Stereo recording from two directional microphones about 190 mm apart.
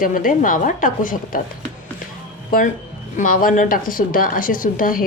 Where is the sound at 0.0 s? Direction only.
45° left (ahead or behind).